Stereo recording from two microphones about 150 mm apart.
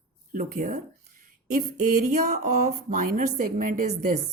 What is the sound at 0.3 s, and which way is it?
Speech, 70° right (ahead or behind).